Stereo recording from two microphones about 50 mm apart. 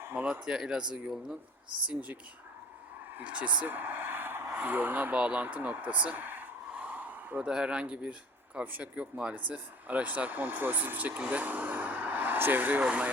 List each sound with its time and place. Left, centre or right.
0.3 s speech: centre
3.2 s speech: right
3.7 s a sound: right
4.5 s speech: right
5.1 s speech: right
6.7 s a sound: right
7.4 s speech: centre; by 12.8 s right
12.8 s speech: right